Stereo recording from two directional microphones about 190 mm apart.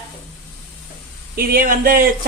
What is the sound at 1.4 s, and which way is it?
Speech, 50° right (ahead or behind).